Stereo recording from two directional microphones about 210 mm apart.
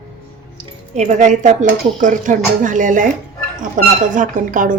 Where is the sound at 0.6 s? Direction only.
35° right (ahead or behind).